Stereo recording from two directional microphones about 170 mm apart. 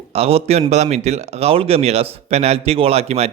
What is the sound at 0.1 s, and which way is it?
A man's voice, 35° right (ahead or behind).